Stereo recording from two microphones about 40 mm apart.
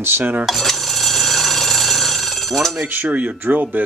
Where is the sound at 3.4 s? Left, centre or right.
Right.